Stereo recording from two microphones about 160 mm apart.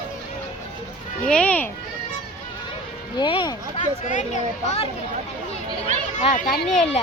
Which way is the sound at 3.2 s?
30° left (ahead or behind).